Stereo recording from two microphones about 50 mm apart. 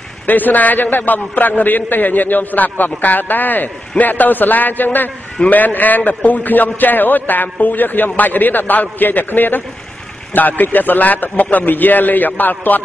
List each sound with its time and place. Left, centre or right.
0.3 s a man's voice: left